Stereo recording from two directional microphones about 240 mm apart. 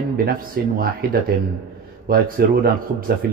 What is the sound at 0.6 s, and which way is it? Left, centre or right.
A man's voice, right.